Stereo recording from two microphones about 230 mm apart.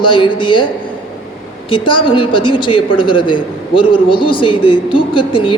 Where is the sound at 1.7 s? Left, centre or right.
Left.